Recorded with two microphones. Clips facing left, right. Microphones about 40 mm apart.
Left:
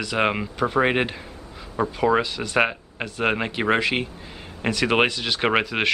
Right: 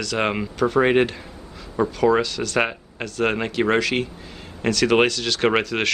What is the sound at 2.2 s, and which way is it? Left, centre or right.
Speech, centre.